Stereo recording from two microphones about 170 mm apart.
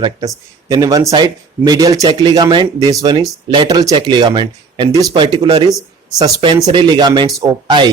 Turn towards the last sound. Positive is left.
turn(degrees=-25)  # may be behind; listen again after turning